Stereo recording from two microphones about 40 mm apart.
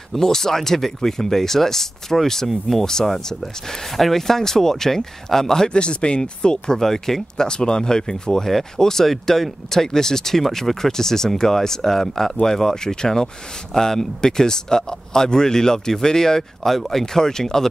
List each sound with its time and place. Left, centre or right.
0.1 s speech: centre
5.7 s speech: left
6.8 s speech: centre
7.4 s speech: left